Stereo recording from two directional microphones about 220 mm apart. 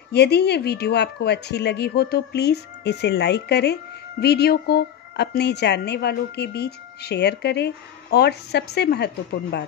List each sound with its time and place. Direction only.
0.1 s a woman's voice: 50° left (ahead or behind)